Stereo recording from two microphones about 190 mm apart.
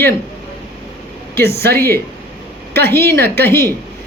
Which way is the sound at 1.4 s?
55° right (ahead or behind).